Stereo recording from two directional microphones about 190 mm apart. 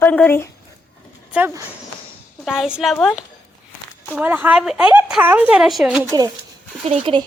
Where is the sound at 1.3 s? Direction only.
10° right (ahead or behind).